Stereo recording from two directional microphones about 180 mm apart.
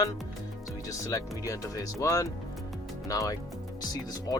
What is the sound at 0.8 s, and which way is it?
Speech, 20° left (ahead or behind).